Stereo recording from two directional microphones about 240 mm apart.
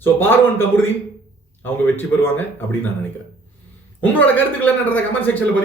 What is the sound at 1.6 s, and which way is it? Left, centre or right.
A man's voice, centre.